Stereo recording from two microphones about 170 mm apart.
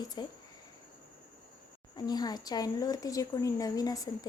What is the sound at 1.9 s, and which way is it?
Speech, 25° left (ahead or behind).